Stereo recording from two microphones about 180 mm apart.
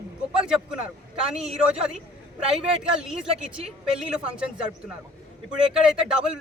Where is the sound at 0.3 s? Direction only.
5° right (ahead or behind).